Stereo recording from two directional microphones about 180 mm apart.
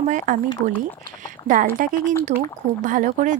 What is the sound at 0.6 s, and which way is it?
Speech, 65° right (ahead or behind).